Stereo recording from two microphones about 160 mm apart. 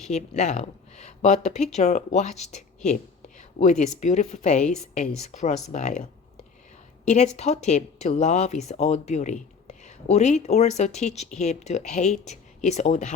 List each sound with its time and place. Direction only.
0.0 s speech: 45° left (ahead or behind)
7.0 s speech: 45° left (ahead or behind)